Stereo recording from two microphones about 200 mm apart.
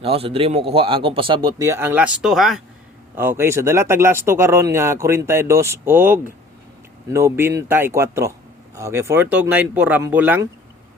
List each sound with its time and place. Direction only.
0.0 s speech: 30° right (ahead or behind); by 10.5 s 10° right (ahead or behind)